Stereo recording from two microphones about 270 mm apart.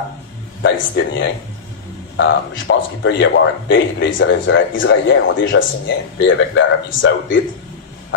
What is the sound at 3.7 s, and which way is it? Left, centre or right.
Speech, left.